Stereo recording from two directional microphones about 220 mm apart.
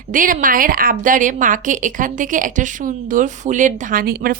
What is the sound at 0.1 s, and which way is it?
A woman's voice, 40° right (ahead or behind).